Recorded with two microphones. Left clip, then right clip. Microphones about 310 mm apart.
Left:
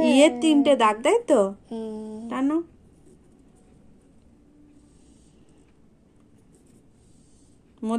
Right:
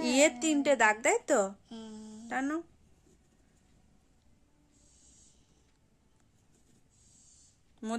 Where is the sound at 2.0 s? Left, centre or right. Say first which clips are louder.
Left 3 dB; centre.